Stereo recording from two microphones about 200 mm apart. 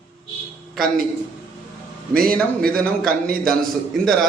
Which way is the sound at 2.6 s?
50° right (ahead or behind).